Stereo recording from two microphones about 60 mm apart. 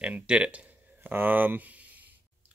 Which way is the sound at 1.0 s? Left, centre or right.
Right.